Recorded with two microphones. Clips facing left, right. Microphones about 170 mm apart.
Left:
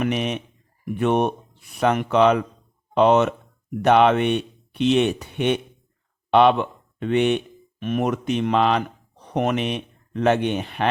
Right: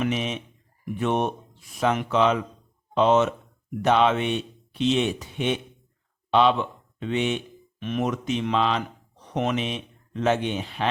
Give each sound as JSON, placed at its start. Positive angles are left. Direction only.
{"t": 0.0, "sound": "speech", "side_deg": 60}